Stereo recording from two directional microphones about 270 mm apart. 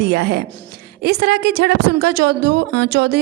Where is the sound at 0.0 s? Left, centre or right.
Right.